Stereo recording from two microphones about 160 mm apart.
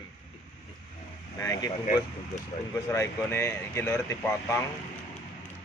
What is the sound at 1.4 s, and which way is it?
Speech, 20° left (ahead or behind).